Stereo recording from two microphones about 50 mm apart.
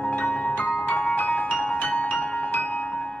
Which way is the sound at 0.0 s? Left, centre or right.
Left.